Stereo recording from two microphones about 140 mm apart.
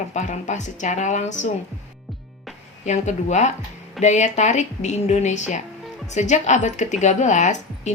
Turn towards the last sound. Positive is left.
turn(degrees=60)  # may be behind; listen again after turning